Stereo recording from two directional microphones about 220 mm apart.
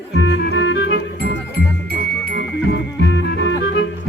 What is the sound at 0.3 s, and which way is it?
Music, 60° left (ahead or behind).